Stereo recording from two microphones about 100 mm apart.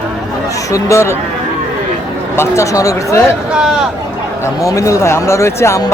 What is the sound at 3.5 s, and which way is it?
Speech, 5° right (ahead or behind).